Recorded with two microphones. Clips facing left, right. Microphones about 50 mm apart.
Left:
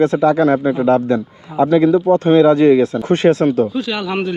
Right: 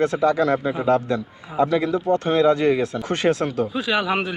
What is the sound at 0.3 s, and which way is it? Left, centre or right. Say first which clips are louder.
Speech: left 6 dB; left.